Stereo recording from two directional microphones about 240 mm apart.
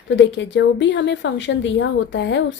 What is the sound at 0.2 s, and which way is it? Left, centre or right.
A woman's voice, left.